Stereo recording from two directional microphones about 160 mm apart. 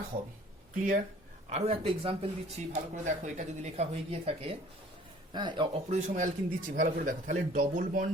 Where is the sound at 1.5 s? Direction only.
40° right (ahead or behind).